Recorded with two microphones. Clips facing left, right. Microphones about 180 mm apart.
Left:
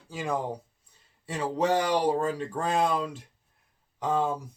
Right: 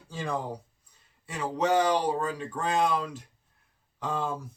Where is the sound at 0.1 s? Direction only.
15° left (ahead or behind).